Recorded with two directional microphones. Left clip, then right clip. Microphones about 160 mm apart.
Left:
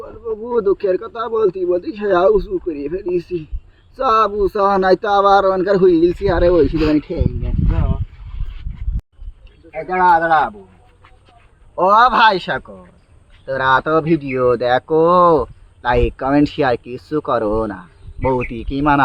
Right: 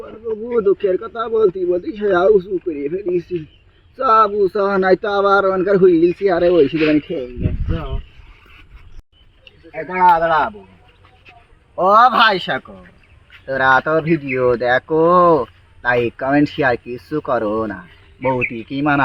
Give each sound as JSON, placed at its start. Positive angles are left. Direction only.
{"t": 0.4, "sound": "speech", "side_deg": 0}
{"t": 6.7, "sound": "speech", "side_deg": 30}
{"t": 10.2, "sound": "speech", "side_deg": 35}
{"t": 11.8, "sound": "speech", "side_deg": 35}